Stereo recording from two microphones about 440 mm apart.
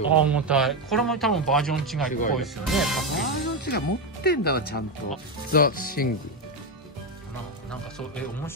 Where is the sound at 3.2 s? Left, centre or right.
Left.